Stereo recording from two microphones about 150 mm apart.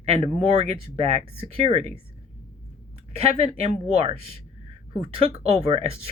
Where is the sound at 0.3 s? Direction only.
45° right (ahead or behind).